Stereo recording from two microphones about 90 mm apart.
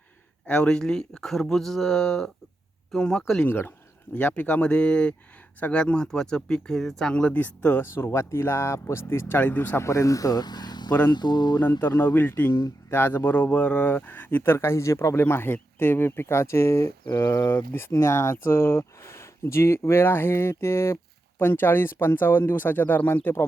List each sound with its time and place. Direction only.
0.4 s speech: 10° left (ahead or behind)
3.4 s speech: 25° left (ahead or behind); by 10.9 s 50° left (ahead or behind)
11.1 s mantra: 55° left (ahead or behind)
11.8 s speech: 25° left (ahead or behind)
12.5 s speech: 40° left (ahead or behind)
12.9 s speech: 25° left (ahead or behind)